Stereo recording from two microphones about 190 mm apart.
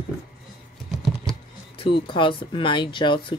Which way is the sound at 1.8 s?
25° left (ahead or behind).